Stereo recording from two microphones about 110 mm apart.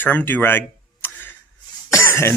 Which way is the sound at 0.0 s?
20° left (ahead or behind).